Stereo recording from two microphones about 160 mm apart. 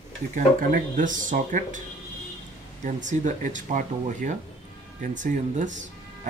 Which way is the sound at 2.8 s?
50° right (ahead or behind).